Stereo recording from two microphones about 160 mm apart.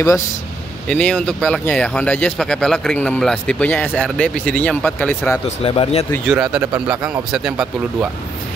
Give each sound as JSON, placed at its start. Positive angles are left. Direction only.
{"t": 0.8, "sound": "speech", "side_deg": 5}
{"t": 5.6, "sound": "a man's voice", "side_deg": 35}
{"t": 6.2, "sound": "speech", "side_deg": -5}